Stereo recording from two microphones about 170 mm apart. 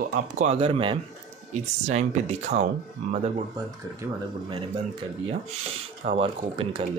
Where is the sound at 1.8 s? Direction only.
40° right (ahead or behind).